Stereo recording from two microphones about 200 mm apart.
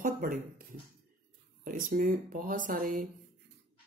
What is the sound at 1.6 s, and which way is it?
A woman's voice, 45° right (ahead or behind).